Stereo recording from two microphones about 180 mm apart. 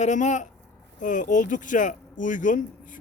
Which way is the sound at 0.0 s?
45° left (ahead or behind).